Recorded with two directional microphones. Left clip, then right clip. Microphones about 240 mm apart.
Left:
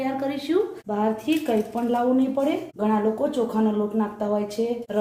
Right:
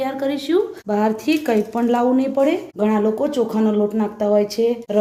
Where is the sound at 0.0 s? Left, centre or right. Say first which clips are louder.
Right 5 dB; right.